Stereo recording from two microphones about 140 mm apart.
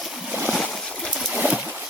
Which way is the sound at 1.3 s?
10° right (ahead or behind).